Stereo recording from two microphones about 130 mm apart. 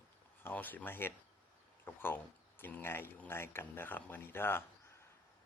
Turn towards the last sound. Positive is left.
turn(degrees=15)  # may be behind; listen again after turning